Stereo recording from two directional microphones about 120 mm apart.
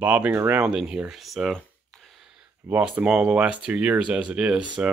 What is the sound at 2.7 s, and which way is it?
Speech, 10° right (ahead or behind).